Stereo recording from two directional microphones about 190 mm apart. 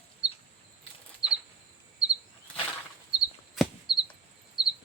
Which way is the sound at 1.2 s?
20° left (ahead or behind).